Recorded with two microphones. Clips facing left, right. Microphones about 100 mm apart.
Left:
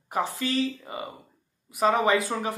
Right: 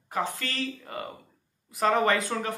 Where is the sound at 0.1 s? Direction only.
10° left (ahead or behind).